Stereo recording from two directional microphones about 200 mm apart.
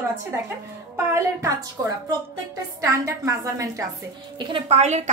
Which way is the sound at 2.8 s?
15° right (ahead or behind).